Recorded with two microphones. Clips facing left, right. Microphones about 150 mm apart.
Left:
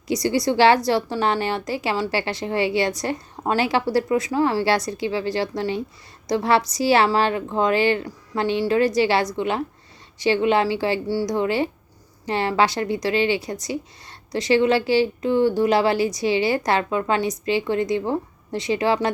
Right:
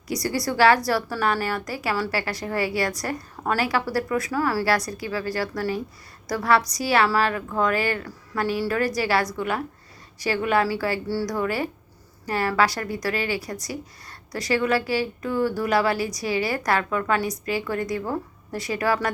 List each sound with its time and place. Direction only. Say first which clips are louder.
0.1 s speech: left 5 dB; 20° left (ahead or behind)